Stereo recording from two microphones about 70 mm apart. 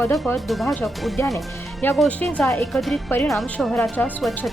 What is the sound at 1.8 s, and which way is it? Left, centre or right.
Speech, left.